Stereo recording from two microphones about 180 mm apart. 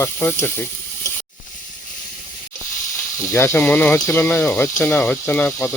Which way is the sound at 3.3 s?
15° left (ahead or behind).